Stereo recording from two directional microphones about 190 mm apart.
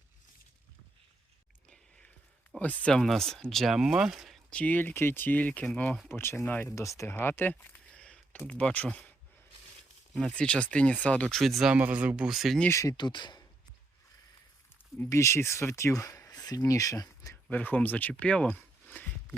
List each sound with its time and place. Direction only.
2.6 s speech: 10° left (ahead or behind)
10.2 s speech: 5° left (ahead or behind)
12.6 s speech: 15° left (ahead or behind)
14.9 s speech: 15° left (ahead or behind)